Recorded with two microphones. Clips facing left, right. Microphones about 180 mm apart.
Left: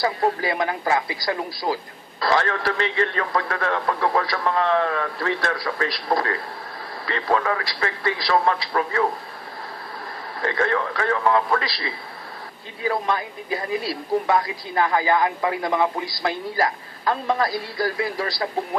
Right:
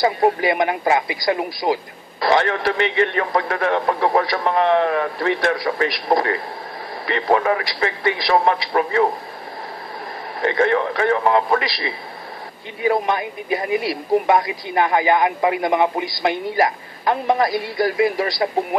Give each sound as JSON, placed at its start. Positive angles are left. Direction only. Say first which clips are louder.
{"t": 0.0, "sound": "a man's voice", "louder": "right 5 dB", "side_deg": -20}
{"t": 10.4, "sound": "a man's voice", "louder": "right 5 dB", "side_deg": -20}